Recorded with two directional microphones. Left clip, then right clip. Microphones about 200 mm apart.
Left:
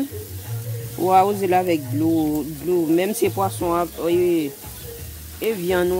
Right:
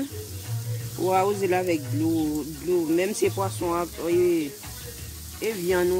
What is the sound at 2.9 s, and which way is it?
Speech, 55° left (ahead or behind).